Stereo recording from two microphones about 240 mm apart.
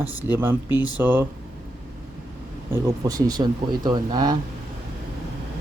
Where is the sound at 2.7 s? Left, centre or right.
Centre.